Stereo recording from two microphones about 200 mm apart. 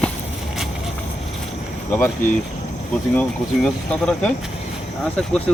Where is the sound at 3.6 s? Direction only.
5° left (ahead or behind).